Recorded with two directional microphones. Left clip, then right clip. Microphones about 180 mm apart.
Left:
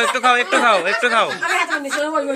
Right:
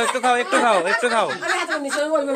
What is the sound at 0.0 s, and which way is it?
Speech, 20° right (ahead or behind).